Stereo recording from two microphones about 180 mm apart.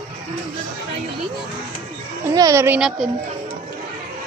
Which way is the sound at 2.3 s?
15° right (ahead or behind).